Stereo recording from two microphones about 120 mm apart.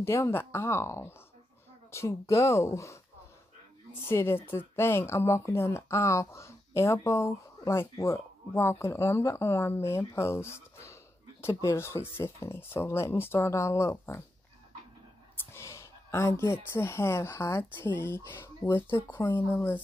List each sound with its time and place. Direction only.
0.0 s a woman's voice: 20° left (ahead or behind)
4.1 s a woman's voice: 20° left (ahead or behind)
15.5 s speech: 25° left (ahead or behind)